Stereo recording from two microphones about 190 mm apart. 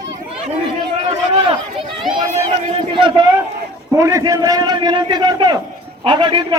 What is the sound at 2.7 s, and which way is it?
A man's voice, 25° right (ahead or behind).